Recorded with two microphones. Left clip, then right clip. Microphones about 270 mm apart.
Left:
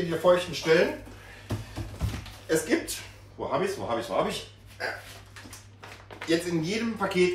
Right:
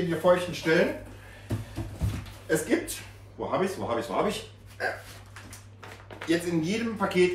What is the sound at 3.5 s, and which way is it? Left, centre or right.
Speech, centre.